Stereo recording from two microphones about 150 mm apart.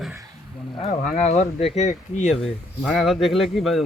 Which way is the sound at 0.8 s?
55° left (ahead or behind).